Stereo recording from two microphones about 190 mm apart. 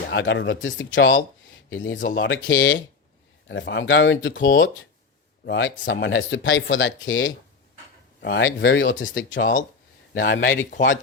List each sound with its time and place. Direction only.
0.1 s speech: 70° left (ahead or behind)
10.4 s speech: 40° left (ahead or behind)